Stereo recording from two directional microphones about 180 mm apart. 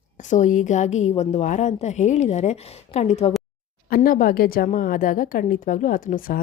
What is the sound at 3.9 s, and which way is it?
Speech, 50° left (ahead or behind).